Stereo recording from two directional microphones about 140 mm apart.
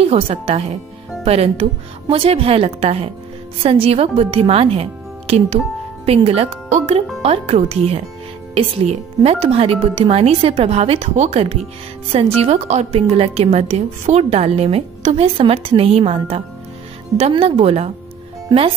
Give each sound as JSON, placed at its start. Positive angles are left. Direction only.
{"t": 0.0, "sound": "a woman's voice", "side_deg": -45}